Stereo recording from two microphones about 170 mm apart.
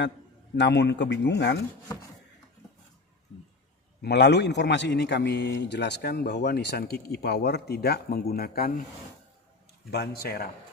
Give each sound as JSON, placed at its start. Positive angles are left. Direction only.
{"t": 0.6, "sound": "a man's voice", "side_deg": 90}
{"t": 4.0, "sound": "a man's voice", "side_deg": 75}
{"t": 9.8, "sound": "a man's voice", "side_deg": 70}